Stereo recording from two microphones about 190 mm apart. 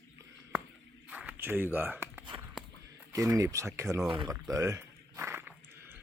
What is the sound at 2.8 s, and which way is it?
Speech, 15° right (ahead or behind).